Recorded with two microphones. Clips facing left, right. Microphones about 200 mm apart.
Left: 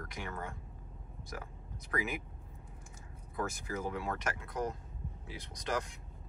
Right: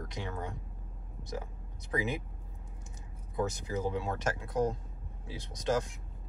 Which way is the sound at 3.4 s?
20° right (ahead or behind).